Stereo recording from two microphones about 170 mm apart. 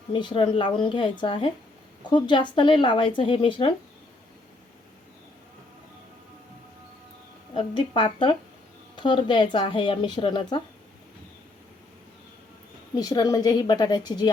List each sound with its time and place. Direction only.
0.1 s speech: 30° left (ahead or behind)
7.5 s speech: 30° left (ahead or behind)
13.0 s speech: 20° left (ahead or behind)